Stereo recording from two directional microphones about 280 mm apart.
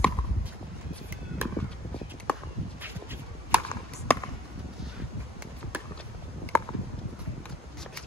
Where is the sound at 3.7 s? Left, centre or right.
Centre.